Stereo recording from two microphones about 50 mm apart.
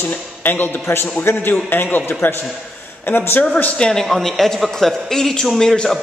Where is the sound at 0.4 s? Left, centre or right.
Left.